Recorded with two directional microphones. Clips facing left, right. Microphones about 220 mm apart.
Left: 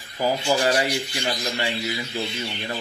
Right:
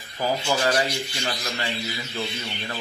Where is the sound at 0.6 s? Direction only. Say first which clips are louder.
Left 2 dB; 25° left (ahead or behind).